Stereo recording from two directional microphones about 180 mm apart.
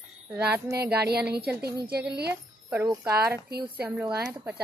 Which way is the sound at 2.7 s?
15° right (ahead or behind).